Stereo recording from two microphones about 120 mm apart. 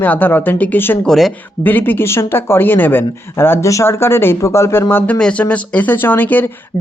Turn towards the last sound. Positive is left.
turn(degrees=15)  # may be behind; listen again after turning